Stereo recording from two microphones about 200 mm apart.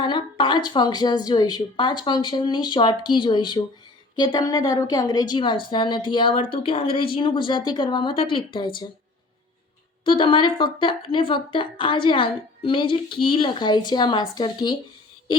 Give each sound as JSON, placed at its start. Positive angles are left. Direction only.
{"t": 0.0, "sound": "a woman's voice", "side_deg": 25}
{"t": 10.0, "sound": "a woman's voice", "side_deg": 25}